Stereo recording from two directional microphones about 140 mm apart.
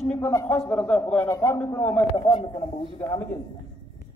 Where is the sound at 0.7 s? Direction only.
10° left (ahead or behind).